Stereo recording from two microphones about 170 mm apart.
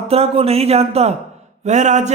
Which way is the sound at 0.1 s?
35° right (ahead or behind).